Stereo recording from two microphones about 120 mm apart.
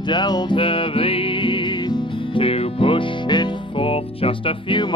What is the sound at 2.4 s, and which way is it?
Music, 50° left (ahead or behind).